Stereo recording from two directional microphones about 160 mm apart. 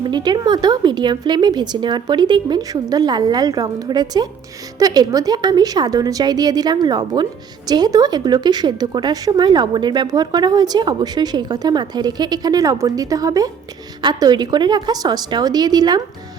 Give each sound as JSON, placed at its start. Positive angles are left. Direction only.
{"t": 0.0, "sound": "a woman's voice", "side_deg": -25}